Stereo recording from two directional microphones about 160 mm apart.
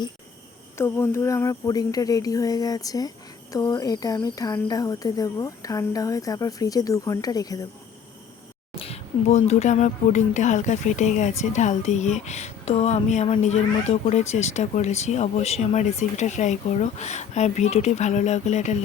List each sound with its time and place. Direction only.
0.8 s speech: 15° left (ahead or behind)
8.7 s speech: 40° left (ahead or behind)